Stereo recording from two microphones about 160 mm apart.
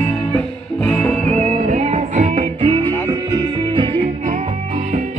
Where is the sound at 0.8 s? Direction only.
5° left (ahead or behind).